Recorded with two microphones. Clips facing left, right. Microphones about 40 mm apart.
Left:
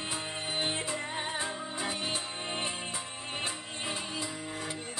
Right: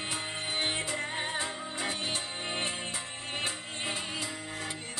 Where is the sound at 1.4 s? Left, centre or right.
Centre.